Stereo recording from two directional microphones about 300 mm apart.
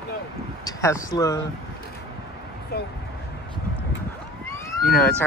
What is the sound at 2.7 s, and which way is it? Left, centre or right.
Speech, left.